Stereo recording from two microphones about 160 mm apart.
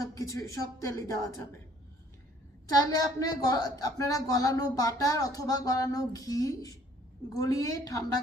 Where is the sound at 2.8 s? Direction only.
20° left (ahead or behind).